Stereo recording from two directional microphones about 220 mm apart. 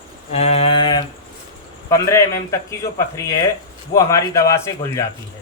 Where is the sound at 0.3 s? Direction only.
30° left (ahead or behind).